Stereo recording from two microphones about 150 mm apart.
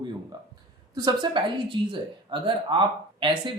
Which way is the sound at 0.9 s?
30° right (ahead or behind).